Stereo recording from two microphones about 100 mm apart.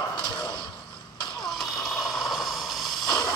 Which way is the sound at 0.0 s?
45° left (ahead or behind).